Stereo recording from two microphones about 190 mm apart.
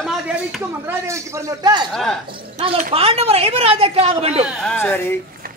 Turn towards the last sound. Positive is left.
turn(degrees=10)  # may be behind; listen again after turning